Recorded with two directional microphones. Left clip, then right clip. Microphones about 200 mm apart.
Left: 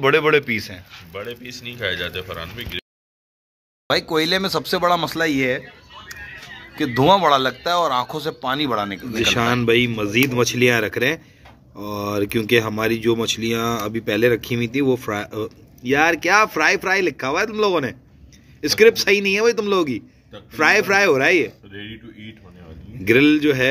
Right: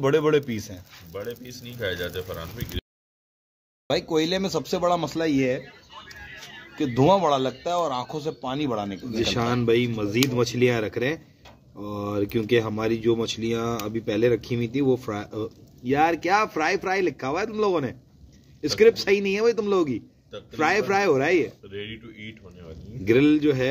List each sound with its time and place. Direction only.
0.0 s a man's voice: 15° right (ahead or behind)
1.1 s speech: 50° right (ahead or behind)
3.8 s a man's voice: 10° right (ahead or behind)
6.7 s a man's voice: 5° right (ahead or behind)
21.6 s speech: 30° right (ahead or behind)
23.0 s speech: 5° right (ahead or behind)